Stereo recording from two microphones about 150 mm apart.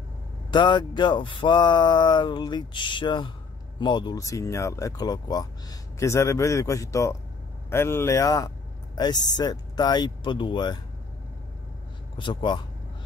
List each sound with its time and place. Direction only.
0.5 s speech: 30° left (ahead or behind)
12.2 s speech: 35° left (ahead or behind)